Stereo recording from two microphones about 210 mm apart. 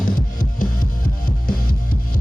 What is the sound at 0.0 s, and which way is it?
Music, 40° left (ahead or behind).